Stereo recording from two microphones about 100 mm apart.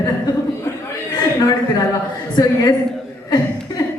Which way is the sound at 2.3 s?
45° left (ahead or behind).